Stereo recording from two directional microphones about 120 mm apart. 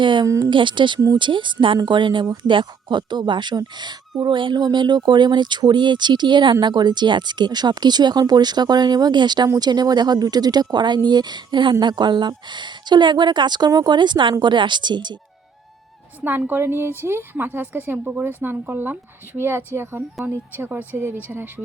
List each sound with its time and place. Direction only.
0.0 s speech: 40° right (ahead or behind)
0.3 s speech: 30° right (ahead or behind)
0.5 s a woman's voice: 40° right (ahead or behind)
16.2 s a woman's voice: 15° right (ahead or behind)